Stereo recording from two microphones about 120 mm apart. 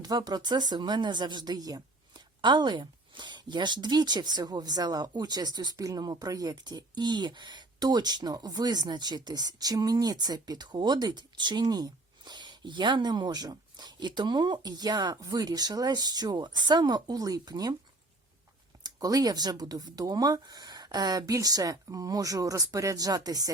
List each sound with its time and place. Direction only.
0.0 s a woman's voice: 35° right (ahead or behind)
18.8 s a woman's voice: 30° right (ahead or behind)